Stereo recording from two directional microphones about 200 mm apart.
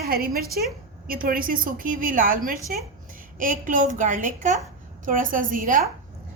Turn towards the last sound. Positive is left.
turn(degrees=-45)  # may be behind; listen again after turning